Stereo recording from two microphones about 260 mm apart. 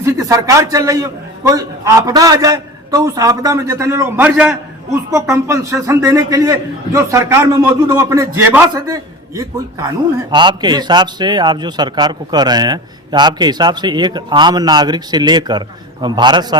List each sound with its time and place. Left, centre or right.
0.0 s a man's voice: centre